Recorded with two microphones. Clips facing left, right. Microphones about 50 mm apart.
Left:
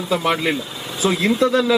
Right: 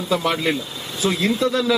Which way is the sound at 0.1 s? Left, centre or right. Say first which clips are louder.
Left 1 dB; centre.